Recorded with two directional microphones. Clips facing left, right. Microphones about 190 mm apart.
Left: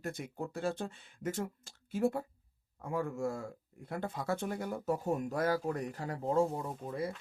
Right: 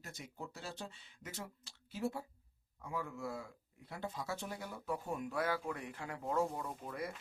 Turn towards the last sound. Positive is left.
turn(degrees=25)  # may be behind; listen again after turning